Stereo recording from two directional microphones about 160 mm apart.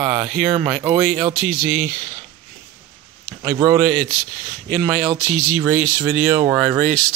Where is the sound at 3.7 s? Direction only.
5° right (ahead or behind).